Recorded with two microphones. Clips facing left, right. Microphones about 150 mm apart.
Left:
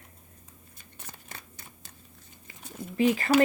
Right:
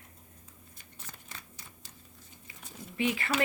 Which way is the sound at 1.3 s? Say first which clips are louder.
Left 3 dB; 55° left (ahead or behind).